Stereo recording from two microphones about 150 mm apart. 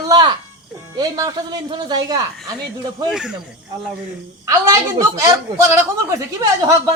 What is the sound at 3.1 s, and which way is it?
Speech, 5° right (ahead or behind).